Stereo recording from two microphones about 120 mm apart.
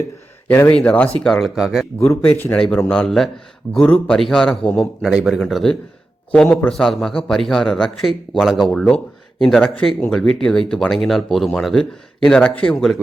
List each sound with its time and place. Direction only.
0.4 s a man's voice: 15° left (ahead or behind); by 1.9 s 5° right (ahead or behind)
2.0 s a man's voice: 15° left (ahead or behind)